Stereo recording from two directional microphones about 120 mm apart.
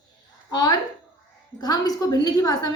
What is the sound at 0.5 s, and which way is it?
A woman's voice, 35° left (ahead or behind).